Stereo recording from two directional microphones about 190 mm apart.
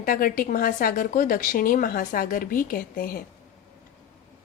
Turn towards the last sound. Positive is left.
turn(degrees=50)  # may be behind; listen again after turning